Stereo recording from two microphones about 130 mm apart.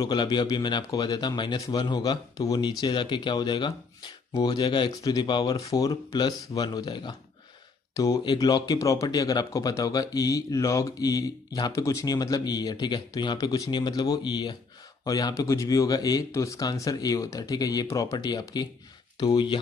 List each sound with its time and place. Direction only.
0.0 s speech: 35° left (ahead or behind)